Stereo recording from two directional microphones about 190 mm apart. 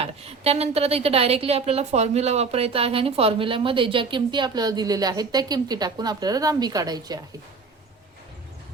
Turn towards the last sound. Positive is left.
turn(degrees=-20)  # may be behind; listen again after turning